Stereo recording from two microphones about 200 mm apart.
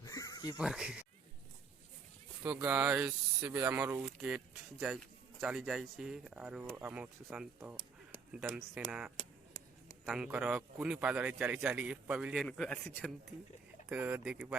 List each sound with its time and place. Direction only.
0.0 s a sound: 15° left (ahead or behind)
0.6 s speech: 5° right (ahead or behind)
2.4 s speech: 5° right (ahead or behind)
10.2 s speech: 10° right (ahead or behind); by 13.1 s 5° left (ahead or behind)
13.8 s speech: 10° right (ahead or behind)